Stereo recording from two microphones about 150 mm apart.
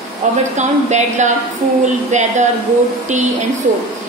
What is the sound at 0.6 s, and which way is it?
A woman's voice, 50° right (ahead or behind).